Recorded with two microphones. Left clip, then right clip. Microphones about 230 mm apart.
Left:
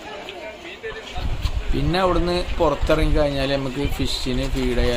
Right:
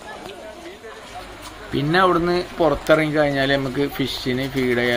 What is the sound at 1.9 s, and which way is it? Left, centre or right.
Speech, centre.